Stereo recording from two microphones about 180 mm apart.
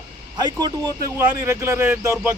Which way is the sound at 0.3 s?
20° right (ahead or behind).